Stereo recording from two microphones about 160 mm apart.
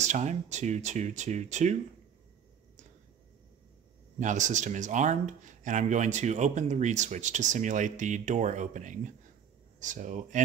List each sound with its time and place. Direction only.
0.0 s speech: 45° right (ahead or behind)
4.2 s speech: 50° right (ahead or behind)